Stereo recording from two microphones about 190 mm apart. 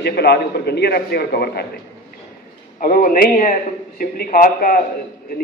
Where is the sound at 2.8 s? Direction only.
45° left (ahead or behind).